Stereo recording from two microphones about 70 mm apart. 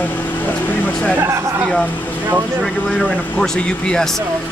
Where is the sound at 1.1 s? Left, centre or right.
Right.